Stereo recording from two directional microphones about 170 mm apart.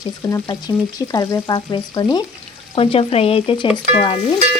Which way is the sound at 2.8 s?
35° left (ahead or behind).